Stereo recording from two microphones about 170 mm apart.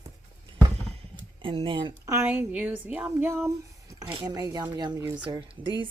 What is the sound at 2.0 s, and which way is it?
Speech, 15° right (ahead or behind).